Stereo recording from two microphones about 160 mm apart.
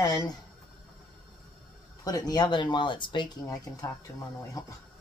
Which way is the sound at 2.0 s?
25° left (ahead or behind).